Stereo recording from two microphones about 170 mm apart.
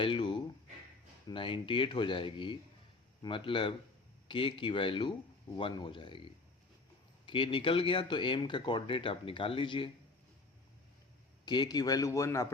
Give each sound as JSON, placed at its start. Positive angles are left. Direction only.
{"t": 0.0, "sound": "a sound", "side_deg": 30}
{"t": 1.3, "sound": "speech", "side_deg": 30}
{"t": 7.3, "sound": "speech", "side_deg": 30}
{"t": 11.4, "sound": "speech", "side_deg": 25}